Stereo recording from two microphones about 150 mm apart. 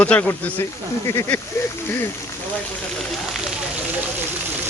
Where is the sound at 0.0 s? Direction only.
10° left (ahead or behind).